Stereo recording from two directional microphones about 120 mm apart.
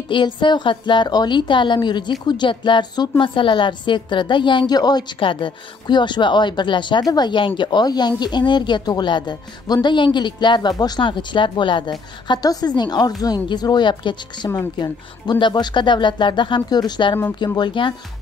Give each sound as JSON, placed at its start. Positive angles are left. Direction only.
{"t": 0.1, "sound": "a woman's voice", "side_deg": 40}